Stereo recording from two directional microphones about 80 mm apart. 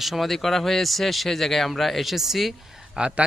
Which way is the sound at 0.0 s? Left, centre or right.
Centre.